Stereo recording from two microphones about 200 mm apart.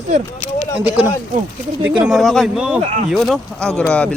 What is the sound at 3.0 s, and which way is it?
Speech, centre (ahead or behind).